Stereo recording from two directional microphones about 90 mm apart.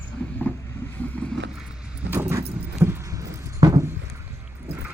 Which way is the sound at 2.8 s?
30° right (ahead or behind).